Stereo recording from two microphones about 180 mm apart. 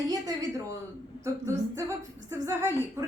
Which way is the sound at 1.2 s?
15° right (ahead or behind).